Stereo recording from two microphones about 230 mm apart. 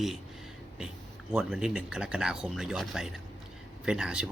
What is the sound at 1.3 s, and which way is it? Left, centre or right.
Speech, centre.